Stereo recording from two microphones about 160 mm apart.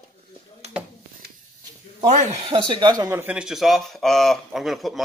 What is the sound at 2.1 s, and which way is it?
Speech, 50° right (ahead or behind).